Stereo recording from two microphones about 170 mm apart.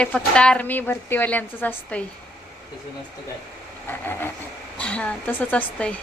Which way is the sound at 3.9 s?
10° left (ahead or behind).